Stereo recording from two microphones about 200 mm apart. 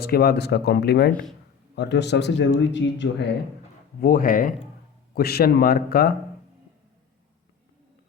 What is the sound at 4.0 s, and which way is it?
Speech, 45° left (ahead or behind).